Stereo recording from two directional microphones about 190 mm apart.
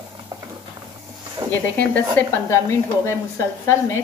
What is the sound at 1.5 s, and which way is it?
A woman's voice, 10° left (ahead or behind).